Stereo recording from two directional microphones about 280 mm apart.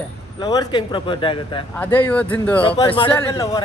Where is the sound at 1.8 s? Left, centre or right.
Centre.